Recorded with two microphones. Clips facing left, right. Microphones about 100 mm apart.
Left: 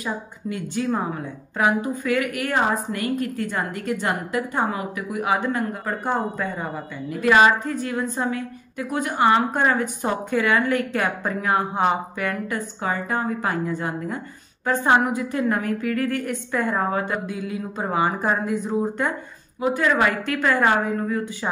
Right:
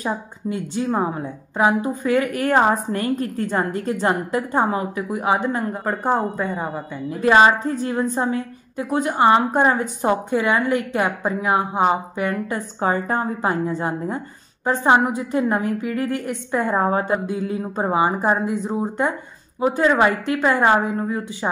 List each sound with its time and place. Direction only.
0.0 s a woman's voice: 30° right (ahead or behind)